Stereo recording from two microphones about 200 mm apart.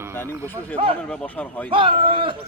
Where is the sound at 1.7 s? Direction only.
25° right (ahead or behind).